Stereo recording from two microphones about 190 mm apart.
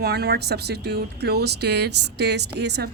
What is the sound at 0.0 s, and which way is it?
Speech, 60° right (ahead or behind).